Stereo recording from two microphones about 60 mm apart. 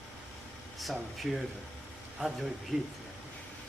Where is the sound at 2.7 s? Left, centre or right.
Centre.